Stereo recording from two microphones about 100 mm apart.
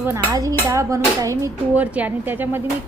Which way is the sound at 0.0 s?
30° right (ahead or behind).